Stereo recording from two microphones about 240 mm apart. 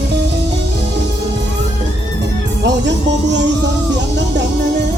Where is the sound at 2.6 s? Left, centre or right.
Right.